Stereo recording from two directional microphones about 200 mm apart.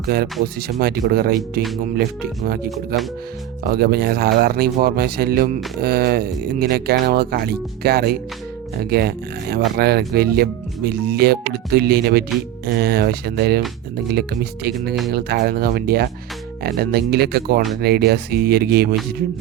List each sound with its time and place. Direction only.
0.1 s speech: 50° right (ahead or behind)
2.6 s speech: centre (ahead or behind)
3.6 s speech: 50° right (ahead or behind)